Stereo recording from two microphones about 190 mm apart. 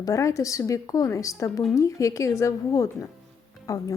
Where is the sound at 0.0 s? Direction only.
15° left (ahead or behind).